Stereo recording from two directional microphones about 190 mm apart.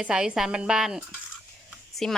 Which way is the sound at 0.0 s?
5° right (ahead or behind).